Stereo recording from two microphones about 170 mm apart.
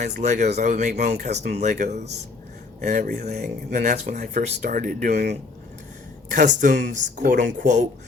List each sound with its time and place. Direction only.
0.2 s speech: 45° right (ahead or behind)
3.4 s speech: 60° right (ahead or behind)
6.3 s speech: 50° right (ahead or behind)